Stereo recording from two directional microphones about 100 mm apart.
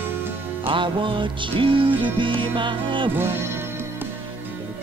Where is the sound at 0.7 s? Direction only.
55° right (ahead or behind).